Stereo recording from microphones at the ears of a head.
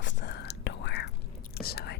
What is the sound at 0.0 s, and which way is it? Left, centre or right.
Whispering, left.